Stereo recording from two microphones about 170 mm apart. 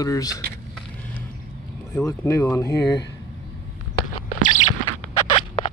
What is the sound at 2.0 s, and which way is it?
Speech, 15° left (ahead or behind).